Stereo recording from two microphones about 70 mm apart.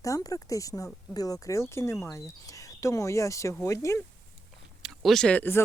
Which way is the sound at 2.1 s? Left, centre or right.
Left.